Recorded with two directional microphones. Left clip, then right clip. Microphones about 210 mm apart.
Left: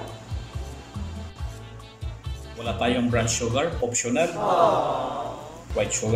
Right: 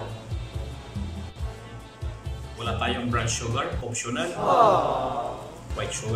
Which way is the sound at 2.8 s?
20° left (ahead or behind).